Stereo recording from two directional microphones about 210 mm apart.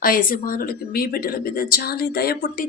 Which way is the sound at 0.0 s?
40° left (ahead or behind).